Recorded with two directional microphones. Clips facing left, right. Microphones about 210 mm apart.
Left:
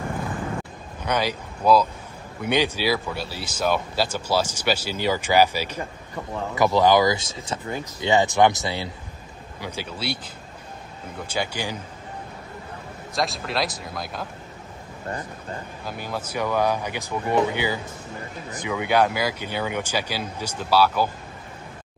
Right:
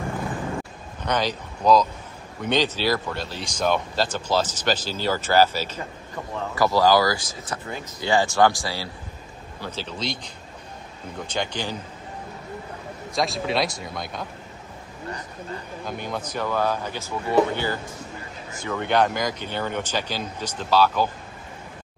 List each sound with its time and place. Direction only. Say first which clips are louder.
1.0 s speech: even; 10° left (ahead or behind)
13.1 s speech: right 2 dB; centre (ahead or behind)
15.8 s speech: right 1 dB; 5° left (ahead or behind)